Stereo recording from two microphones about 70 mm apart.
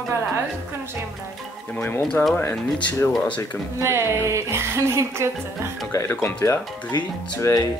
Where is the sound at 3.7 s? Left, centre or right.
Right.